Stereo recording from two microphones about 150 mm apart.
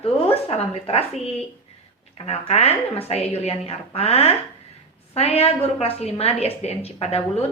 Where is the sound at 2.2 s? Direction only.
45° left (ahead or behind).